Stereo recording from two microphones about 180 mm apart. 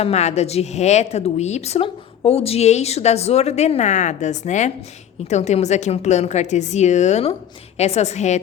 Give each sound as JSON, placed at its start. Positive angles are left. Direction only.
{"t": 0.0, "sound": "a woman's voice", "side_deg": 40}